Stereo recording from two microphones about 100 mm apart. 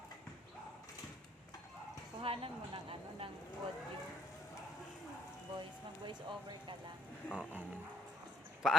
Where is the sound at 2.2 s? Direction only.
65° right (ahead or behind).